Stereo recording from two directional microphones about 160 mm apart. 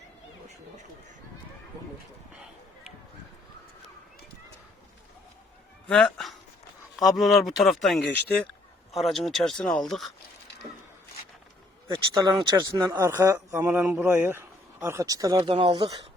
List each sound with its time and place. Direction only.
2.3 s a sound: 5° right (ahead or behind)
5.9 s speech: 5° left (ahead or behind)
11.9 s speech: 25° right (ahead or behind)
13.0 s speech: 15° right (ahead or behind)